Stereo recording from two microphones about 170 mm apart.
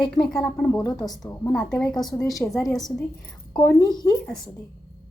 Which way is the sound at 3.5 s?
20° left (ahead or behind).